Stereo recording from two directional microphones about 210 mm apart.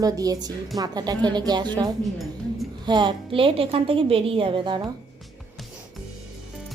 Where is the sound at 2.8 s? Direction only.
20° right (ahead or behind).